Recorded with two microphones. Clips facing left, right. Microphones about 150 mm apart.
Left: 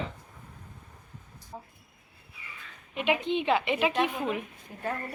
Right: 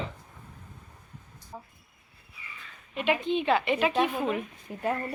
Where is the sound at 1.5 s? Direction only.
15° left (ahead or behind).